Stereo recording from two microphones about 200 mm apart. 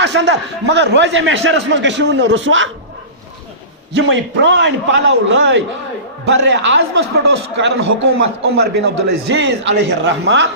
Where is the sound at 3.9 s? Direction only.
60° right (ahead or behind).